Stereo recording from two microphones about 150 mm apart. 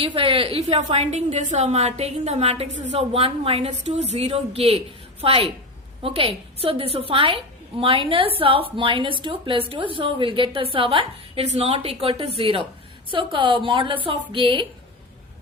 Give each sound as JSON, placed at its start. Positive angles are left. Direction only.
{"t": 0.0, "sound": "a woman's voice", "side_deg": -35}